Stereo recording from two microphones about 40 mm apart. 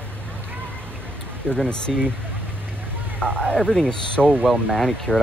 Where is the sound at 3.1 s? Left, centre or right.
Left.